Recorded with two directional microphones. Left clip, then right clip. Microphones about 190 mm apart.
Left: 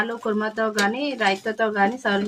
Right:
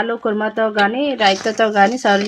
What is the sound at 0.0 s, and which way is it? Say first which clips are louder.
Speech: right 6 dB; 35° right (ahead or behind).